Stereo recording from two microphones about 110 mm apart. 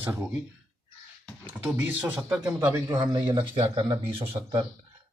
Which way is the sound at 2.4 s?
25° right (ahead or behind).